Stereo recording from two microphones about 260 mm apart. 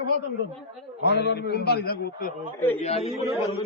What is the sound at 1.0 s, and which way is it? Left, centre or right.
A man's voice, left.